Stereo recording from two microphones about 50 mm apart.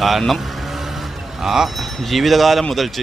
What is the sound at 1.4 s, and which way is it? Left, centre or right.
Speech, centre.